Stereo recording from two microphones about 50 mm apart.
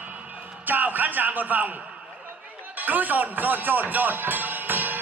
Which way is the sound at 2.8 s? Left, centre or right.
Right.